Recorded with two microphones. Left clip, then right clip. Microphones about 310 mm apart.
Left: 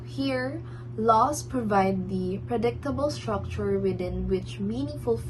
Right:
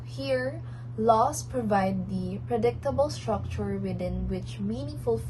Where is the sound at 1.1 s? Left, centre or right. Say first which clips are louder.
Left 2 dB; centre.